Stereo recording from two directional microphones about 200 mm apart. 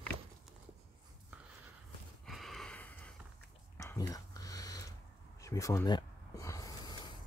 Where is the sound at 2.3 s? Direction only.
Centre (ahead or behind).